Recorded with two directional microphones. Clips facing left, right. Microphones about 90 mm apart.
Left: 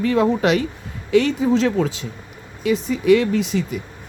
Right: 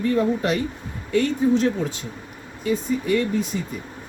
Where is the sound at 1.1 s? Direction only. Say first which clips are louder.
Left 3 dB; 90° left.